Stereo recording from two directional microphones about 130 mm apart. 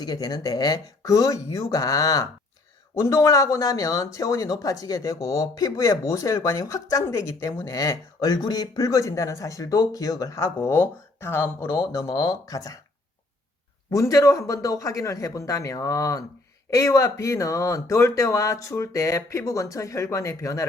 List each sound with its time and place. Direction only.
0.0 s speech: 30° left (ahead or behind)
13.9 s speech: 25° left (ahead or behind)